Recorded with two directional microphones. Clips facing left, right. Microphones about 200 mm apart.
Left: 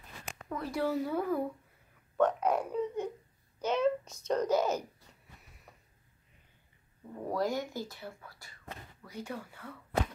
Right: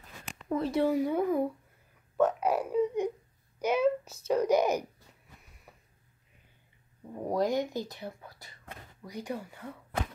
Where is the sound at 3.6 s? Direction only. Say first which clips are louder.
Right 3 dB; 10° right (ahead or behind).